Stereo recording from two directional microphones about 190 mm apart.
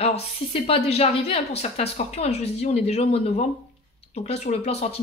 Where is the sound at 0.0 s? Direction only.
30° left (ahead or behind).